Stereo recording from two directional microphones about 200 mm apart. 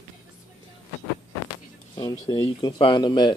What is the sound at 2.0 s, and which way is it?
Speech, 25° left (ahead or behind).